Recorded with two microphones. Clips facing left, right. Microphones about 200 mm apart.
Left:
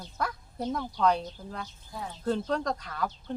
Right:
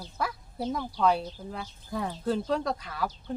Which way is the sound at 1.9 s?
70° right (ahead or behind).